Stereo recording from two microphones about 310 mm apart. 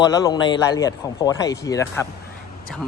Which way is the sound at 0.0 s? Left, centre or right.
Centre.